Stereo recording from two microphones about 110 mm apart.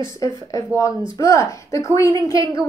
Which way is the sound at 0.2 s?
30° left (ahead or behind).